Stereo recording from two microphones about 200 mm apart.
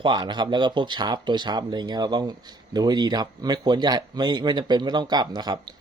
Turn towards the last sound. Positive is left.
turn(degrees=-20)  # may be behind; listen again after turning